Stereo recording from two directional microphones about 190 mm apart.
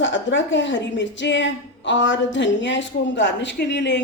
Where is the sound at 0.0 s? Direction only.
75° left (ahead or behind).